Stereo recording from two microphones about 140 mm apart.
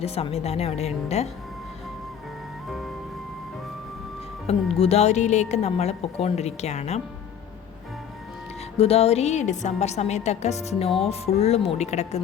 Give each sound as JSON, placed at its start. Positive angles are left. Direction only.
{"t": 0.0, "sound": "speech", "side_deg": 45}
{"t": 4.4, "sound": "speech", "side_deg": 45}
{"t": 8.8, "sound": "speech", "side_deg": 45}